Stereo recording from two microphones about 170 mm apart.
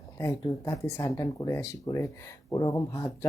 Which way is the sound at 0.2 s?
15° left (ahead or behind).